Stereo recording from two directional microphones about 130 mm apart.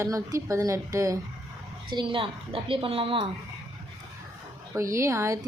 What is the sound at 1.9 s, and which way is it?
A woman's voice, 40° right (ahead or behind).